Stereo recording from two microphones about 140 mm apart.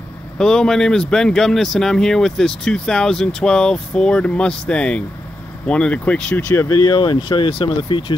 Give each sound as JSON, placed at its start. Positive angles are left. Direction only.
{"t": 0.4, "sound": "speech", "side_deg": 5}
{"t": 6.8, "sound": "speech", "side_deg": 35}